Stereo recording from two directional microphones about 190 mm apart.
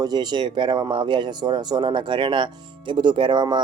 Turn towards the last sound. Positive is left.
turn(degrees=-20)  # may be behind; listen again after turning